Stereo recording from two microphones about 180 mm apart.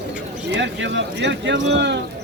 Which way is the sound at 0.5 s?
80° right.